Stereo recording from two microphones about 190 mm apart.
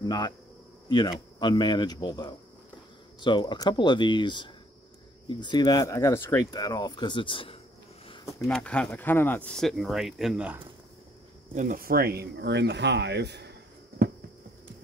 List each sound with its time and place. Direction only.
0.0 s speech: 20° left (ahead or behind)
8.5 s speech: 5° left (ahead or behind)
11.5 s speech: 45° right (ahead or behind)